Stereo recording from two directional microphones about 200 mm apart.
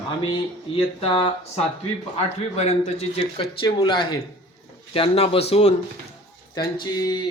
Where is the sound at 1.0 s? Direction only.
25° left (ahead or behind).